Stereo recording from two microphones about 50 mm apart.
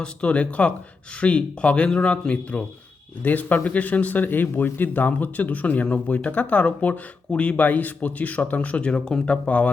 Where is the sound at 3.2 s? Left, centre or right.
Left.